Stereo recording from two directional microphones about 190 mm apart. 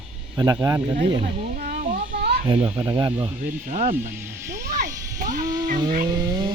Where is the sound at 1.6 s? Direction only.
50° right (ahead or behind).